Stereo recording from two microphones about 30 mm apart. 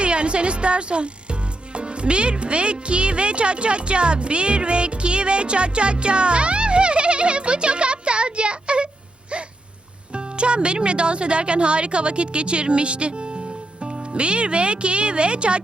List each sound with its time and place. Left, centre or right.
0.0 s speech: right
10.1 s speech: right